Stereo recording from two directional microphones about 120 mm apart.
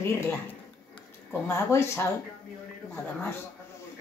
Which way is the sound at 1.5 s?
20° left (ahead or behind).